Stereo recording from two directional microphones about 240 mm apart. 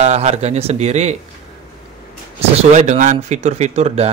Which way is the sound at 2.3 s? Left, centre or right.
Right.